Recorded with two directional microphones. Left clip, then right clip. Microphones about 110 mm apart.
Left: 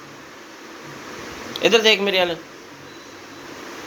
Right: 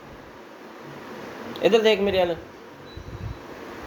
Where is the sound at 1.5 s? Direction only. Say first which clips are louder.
Left 3 dB; centre (ahead or behind).